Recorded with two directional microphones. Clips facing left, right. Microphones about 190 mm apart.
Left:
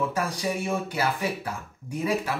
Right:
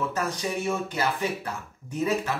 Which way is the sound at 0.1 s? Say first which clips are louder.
Left 1 dB; 10° left (ahead or behind).